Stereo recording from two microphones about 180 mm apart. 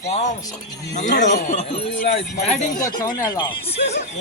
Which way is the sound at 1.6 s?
35° left (ahead or behind).